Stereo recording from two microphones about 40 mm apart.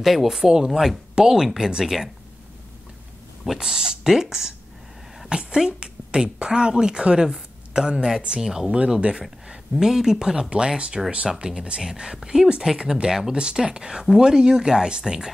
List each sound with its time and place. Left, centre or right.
0.0 s speech: centre
1.1 s speech: centre
3.5 s speech: centre
8.7 s speech: right